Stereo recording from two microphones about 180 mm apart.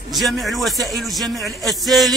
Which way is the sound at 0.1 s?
Centre (ahead or behind).